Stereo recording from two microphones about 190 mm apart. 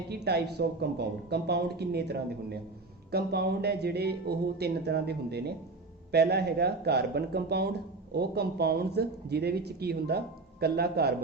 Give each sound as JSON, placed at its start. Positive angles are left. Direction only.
{"t": 0.1, "sound": "speech", "side_deg": -60}